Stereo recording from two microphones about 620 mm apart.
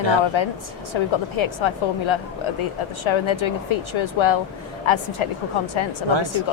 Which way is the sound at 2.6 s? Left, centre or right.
Left.